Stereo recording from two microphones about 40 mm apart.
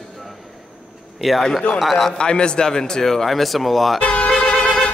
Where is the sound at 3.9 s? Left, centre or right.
Left.